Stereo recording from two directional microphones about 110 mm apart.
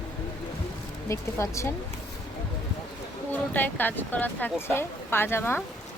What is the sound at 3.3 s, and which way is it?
A woman's voice, 15° left (ahead or behind).